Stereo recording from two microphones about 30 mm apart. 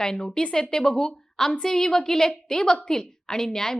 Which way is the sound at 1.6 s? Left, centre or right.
Centre.